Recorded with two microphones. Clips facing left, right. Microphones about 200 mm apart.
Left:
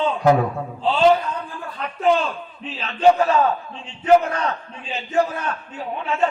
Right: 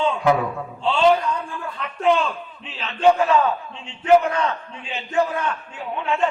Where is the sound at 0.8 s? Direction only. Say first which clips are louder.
Left 1 dB; 35° left (ahead or behind).